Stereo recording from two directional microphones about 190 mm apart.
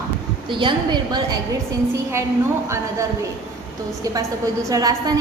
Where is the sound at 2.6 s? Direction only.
15° right (ahead or behind).